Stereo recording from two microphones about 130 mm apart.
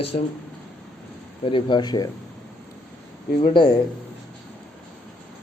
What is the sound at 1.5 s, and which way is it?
Speech, 40° left (ahead or behind).